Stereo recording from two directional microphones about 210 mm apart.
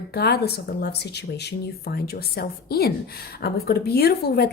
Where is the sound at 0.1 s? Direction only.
50° left (ahead or behind).